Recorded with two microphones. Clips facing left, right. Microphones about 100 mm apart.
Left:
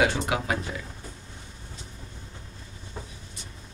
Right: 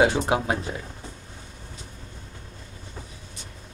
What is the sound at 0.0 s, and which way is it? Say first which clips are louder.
Speech: right 4 dB; 30° right (ahead or behind).